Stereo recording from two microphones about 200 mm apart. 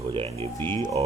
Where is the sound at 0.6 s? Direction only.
10° left (ahead or behind).